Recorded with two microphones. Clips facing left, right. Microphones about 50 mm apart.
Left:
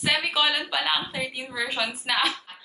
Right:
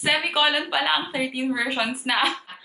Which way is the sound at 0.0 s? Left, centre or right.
Centre.